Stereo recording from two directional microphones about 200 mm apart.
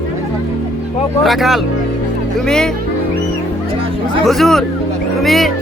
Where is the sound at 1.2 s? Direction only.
Centre (ahead or behind).